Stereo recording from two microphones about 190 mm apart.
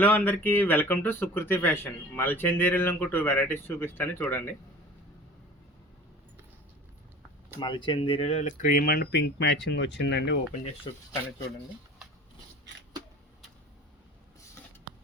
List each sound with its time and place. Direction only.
0.0 s speech: 10° left (ahead or behind)
7.6 s speech: 25° left (ahead or behind); by 10.3 s 65° left (ahead or behind)